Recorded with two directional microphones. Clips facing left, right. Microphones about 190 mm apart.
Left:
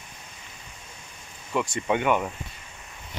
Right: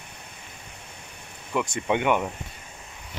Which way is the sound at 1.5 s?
15° right (ahead or behind).